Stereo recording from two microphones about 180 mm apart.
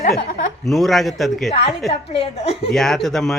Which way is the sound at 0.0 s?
50° left (ahead or behind).